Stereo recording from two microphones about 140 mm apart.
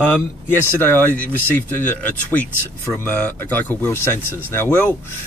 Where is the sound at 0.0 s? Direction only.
10° left (ahead or behind).